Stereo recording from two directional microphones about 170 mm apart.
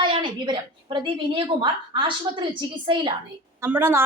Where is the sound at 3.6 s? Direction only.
15° right (ahead or behind).